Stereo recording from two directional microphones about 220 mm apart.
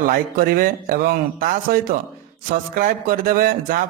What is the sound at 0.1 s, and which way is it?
Speech, 40° right (ahead or behind).